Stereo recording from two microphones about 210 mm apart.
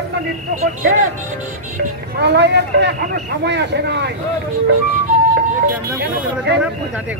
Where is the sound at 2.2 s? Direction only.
55° right (ahead or behind).